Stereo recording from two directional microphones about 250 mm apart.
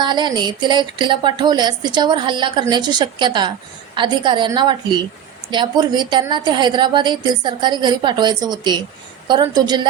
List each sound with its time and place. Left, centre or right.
0.0 s speech: centre